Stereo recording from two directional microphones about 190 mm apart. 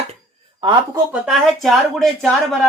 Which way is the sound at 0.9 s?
5° right (ahead or behind).